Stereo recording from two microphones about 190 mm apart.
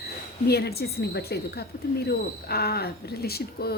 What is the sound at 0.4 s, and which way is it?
A woman's voice, 55° left (ahead or behind).